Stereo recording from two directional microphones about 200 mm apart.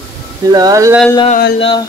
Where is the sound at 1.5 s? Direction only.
25° left (ahead or behind).